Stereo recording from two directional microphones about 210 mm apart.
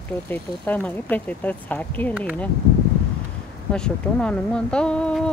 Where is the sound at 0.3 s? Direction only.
10° left (ahead or behind).